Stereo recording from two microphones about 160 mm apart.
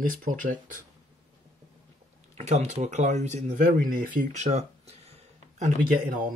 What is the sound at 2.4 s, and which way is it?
Speech, 45° right (ahead or behind).